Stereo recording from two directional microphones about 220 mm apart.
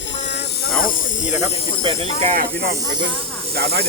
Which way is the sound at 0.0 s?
55° left (ahead or behind).